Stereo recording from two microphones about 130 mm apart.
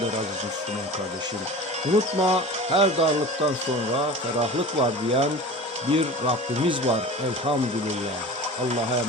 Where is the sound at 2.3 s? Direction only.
50° right (ahead or behind).